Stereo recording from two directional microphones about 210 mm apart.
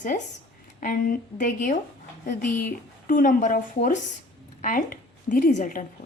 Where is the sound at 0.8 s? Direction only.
40° left (ahead or behind).